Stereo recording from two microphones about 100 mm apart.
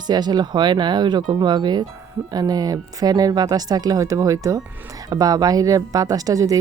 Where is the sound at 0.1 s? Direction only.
45° right (ahead or behind).